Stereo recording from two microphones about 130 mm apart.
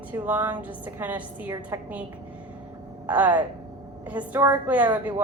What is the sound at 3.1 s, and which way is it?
A woman's voice, 10° right (ahead or behind).